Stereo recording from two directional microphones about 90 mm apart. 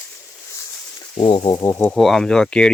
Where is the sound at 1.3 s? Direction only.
50° left (ahead or behind).